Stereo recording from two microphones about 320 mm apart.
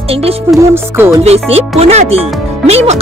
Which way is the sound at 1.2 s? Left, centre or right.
Centre.